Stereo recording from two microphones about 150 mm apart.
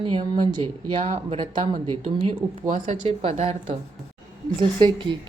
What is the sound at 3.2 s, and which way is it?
Speech, 40° right (ahead or behind).